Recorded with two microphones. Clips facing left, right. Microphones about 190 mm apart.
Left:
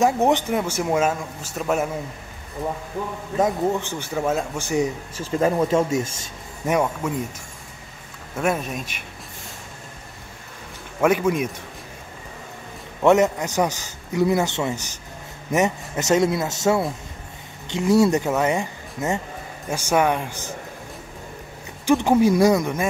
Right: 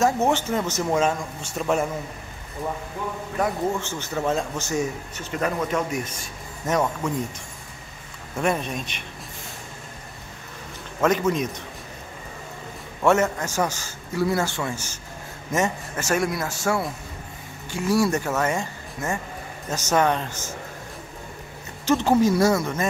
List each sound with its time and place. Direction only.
0.0 s a man's voice: 15° left (ahead or behind)
3.3 s a man's voice: 20° left (ahead or behind)
5.1 s speech: 30° left (ahead or behind)
6.7 s a man's voice: 10° left (ahead or behind)
8.4 s speech: 5° left (ahead or behind)
11.0 s a man's voice: 10° left (ahead or behind)
13.0 s a man's voice: 15° left (ahead or behind)
21.8 s a man's voice: 15° left (ahead or behind)